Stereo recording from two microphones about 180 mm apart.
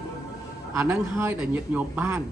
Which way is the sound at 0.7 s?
15° right (ahead or behind).